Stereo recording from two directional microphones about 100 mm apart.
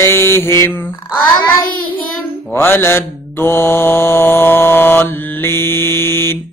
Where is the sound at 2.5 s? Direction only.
25° left (ahead or behind).